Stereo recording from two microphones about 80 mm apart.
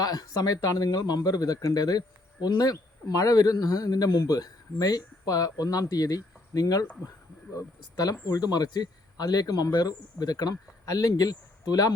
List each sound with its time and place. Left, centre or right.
0.0 s speech: left